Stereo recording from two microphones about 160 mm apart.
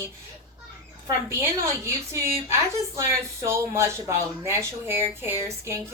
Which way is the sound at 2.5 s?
15° right (ahead or behind).